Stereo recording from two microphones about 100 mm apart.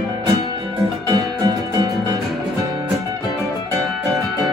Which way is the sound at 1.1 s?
40° right (ahead or behind).